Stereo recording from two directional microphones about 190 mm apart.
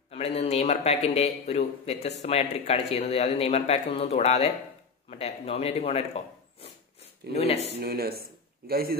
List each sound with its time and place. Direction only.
0.1 s speech: 35° left (ahead or behind)
7.8 s speech: 55° right (ahead or behind)